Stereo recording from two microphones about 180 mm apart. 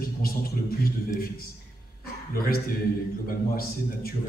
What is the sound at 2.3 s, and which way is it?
A man's voice, 55° left (ahead or behind).